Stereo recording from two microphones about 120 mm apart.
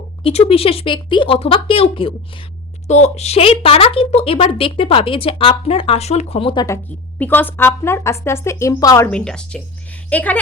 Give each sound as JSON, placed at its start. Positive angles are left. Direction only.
{"t": 0.2, "sound": "speech", "side_deg": 55}
{"t": 2.8, "sound": "speech", "side_deg": 70}
{"t": 7.2, "sound": "speech", "side_deg": 15}
{"t": 9.0, "sound": "a woman's voice", "side_deg": 5}